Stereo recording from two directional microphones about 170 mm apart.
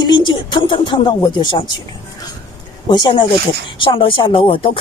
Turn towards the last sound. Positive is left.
turn(degrees=30)  # may be behind; listen again after turning